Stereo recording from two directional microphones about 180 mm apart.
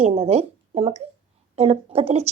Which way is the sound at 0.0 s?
35° right (ahead or behind).